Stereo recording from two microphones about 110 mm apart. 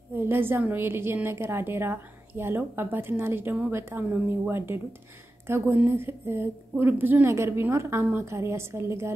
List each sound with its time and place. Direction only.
0.1 s a woman's voice: 20° right (ahead or behind)
5.8 s a woman's voice: 20° right (ahead or behind)